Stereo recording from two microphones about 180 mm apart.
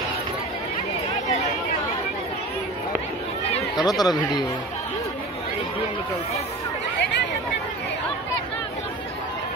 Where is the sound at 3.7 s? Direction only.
20° left (ahead or behind).